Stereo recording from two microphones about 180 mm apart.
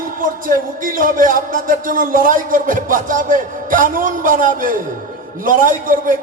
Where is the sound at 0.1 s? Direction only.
50° right (ahead or behind).